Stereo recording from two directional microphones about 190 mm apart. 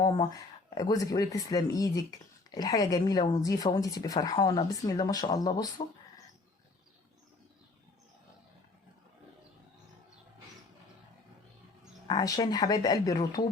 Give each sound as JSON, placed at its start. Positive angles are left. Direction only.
{"t": 0.0, "sound": "speech", "side_deg": 20}
{"t": 12.0, "sound": "speech", "side_deg": 20}